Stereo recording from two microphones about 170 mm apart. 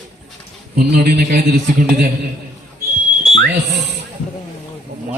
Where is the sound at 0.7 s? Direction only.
65° right (ahead or behind).